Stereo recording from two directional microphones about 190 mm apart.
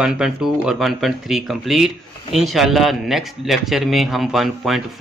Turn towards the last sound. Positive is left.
turn(degrees=0)  # may be behind; listen again after turning